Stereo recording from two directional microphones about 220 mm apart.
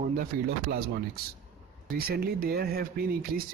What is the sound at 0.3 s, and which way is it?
Speech, 40° right (ahead or behind).